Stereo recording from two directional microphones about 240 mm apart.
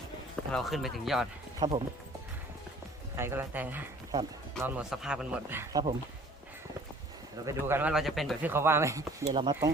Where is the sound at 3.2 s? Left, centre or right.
Centre.